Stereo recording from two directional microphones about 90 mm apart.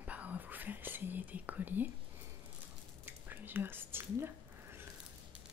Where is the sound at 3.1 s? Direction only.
20° right (ahead or behind).